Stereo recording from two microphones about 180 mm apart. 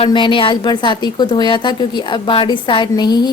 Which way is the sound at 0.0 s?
25° left (ahead or behind).